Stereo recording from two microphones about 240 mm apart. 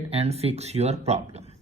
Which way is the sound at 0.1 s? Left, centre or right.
Right.